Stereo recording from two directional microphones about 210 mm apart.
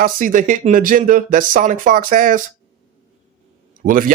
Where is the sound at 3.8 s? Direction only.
40° right (ahead or behind).